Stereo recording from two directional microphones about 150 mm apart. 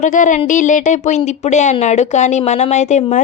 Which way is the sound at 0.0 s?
55° left (ahead or behind).